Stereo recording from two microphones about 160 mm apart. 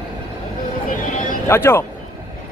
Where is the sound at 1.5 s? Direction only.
15° left (ahead or behind).